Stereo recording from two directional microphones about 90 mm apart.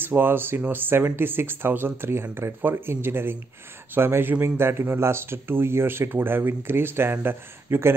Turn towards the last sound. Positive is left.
turn(degrees=-25)  # may be behind; listen again after turning